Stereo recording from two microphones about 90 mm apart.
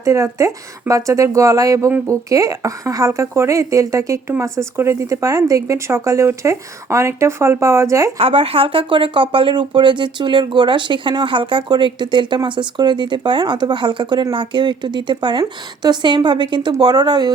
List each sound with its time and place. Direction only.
0.0 s a woman's voice: 35° right (ahead or behind)
8.2 s speech: 90° right; by 16.7 s 60° right (ahead or behind)
16.7 s speech: 45° right (ahead or behind)